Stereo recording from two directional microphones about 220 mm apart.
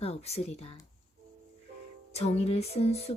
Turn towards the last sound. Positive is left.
turn(degrees=30)  # may be behind; listen again after turning